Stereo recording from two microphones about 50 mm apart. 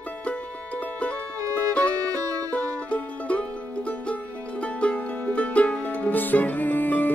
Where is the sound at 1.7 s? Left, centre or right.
Left.